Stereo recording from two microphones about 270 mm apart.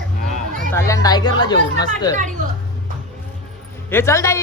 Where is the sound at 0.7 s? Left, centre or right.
Centre.